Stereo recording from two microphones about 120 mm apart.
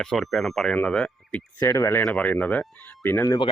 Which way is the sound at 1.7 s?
25° left (ahead or behind).